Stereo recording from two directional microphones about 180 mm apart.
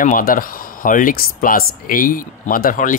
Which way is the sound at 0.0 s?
50° left (ahead or behind).